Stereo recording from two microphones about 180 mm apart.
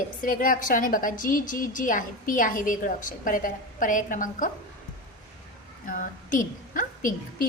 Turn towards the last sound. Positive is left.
turn(degrees=50)  # may be behind; listen again after turning